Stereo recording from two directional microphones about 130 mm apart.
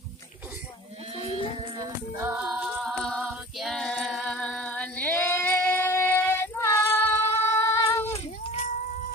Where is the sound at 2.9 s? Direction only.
5° right (ahead or behind); by 7.7 s 20° left (ahead or behind).